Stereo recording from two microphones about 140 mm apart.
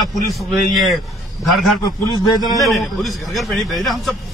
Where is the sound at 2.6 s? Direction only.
Centre (ahead or behind).